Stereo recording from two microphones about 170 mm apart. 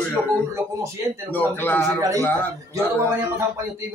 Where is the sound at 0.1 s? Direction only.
15° right (ahead or behind).